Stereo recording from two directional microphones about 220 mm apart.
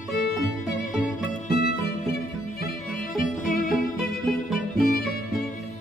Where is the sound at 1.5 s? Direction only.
45° left (ahead or behind).